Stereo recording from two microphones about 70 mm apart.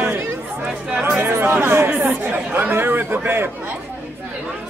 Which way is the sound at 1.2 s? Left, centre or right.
Right.